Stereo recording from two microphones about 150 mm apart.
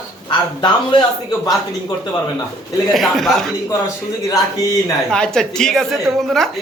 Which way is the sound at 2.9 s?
Centre (ahead or behind).